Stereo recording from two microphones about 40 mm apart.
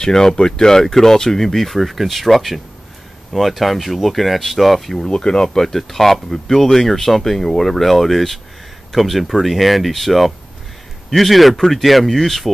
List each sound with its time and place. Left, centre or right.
0.0 s speech: centre
5.0 s speech: centre